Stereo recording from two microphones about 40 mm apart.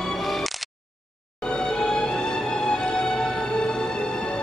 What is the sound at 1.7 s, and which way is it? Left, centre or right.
Music, centre.